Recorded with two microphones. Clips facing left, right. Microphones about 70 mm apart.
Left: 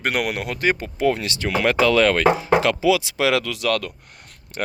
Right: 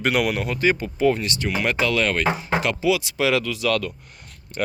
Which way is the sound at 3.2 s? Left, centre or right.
Left.